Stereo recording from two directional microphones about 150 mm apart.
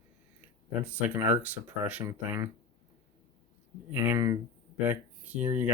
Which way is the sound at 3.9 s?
15° right (ahead or behind).